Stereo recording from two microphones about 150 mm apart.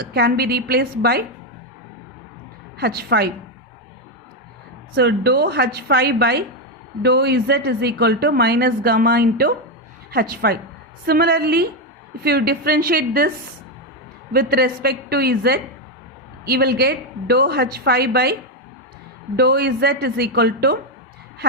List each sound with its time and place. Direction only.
0.0 s a woman's voice: 90° right
2.7 s a woman's voice: 90° right
4.9 s a woman's voice: 90° right
14.3 s a woman's voice: 90° right
19.4 s a woman's voice: 90° right